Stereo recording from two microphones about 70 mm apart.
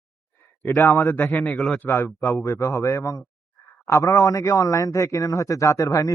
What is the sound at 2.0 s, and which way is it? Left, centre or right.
A man's voice, left.